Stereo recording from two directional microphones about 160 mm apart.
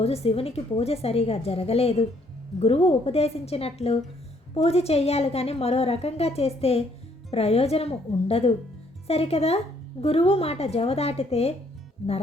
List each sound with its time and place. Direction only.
0.0 s a woman's voice: 40° left (ahead or behind)